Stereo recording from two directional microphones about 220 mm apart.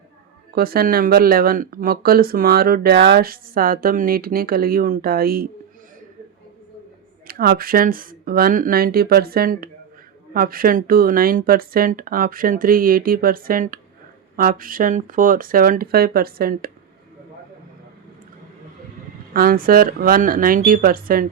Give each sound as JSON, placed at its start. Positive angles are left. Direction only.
{"t": 0.5, "sound": "speech", "side_deg": -45}
{"t": 7.3, "sound": "speech", "side_deg": -45}
{"t": 19.3, "sound": "speech", "side_deg": -40}